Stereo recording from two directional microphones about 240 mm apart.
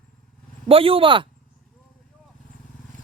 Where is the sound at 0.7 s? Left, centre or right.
Right.